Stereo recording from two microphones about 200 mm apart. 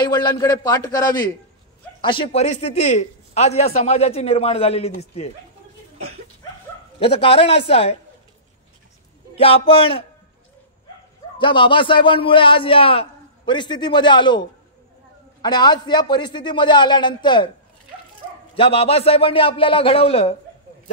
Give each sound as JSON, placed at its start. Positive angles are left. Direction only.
{"t": 0.0, "sound": "a man's voice", "side_deg": 20}
{"t": 7.0, "sound": "a man's voice", "side_deg": 30}
{"t": 9.3, "sound": "a man's voice", "side_deg": 30}
{"t": 11.3, "sound": "a man's voice", "side_deg": 25}
{"t": 15.4, "sound": "a man's voice", "side_deg": 20}
{"t": 18.5, "sound": "a man's voice", "side_deg": 30}